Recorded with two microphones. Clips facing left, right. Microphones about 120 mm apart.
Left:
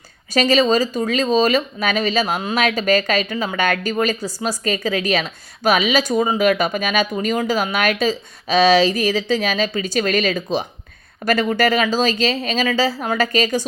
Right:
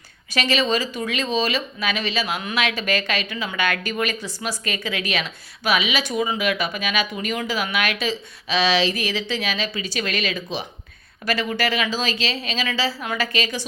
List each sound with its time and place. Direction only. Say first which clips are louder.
0.3 s a woman's voice: left 6 dB; 40° left (ahead or behind)